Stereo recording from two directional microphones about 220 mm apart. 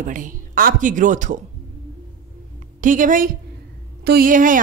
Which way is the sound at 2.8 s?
35° right (ahead or behind).